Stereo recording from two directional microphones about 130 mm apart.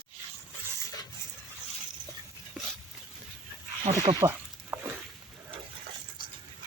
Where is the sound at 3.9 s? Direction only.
60° right (ahead or behind).